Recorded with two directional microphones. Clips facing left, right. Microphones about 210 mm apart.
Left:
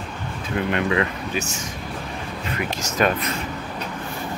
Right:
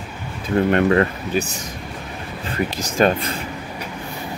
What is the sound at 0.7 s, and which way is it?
Speech, 45° right (ahead or behind).